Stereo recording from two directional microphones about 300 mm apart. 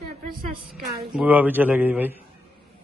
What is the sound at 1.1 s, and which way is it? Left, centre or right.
A man's voice, centre.